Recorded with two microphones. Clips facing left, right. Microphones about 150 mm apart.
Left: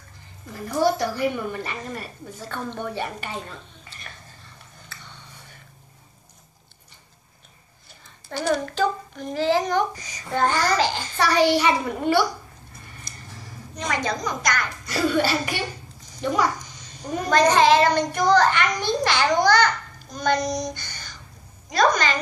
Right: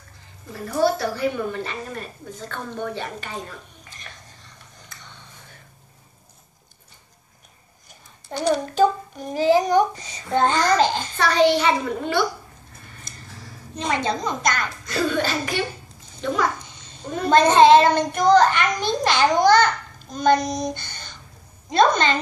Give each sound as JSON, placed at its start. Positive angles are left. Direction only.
{"t": 0.8, "sound": "a woman's voice", "side_deg": 15}
{"t": 8.3, "sound": "a child's voice", "side_deg": -20}
{"t": 11.1, "sound": "a child's voice", "side_deg": 10}
{"t": 13.7, "sound": "a child's voice", "side_deg": -25}
{"t": 14.7, "sound": "a child's voice", "side_deg": 10}
{"t": 16.8, "sound": "a sound", "side_deg": -25}
{"t": 17.3, "sound": "a child's voice", "side_deg": -25}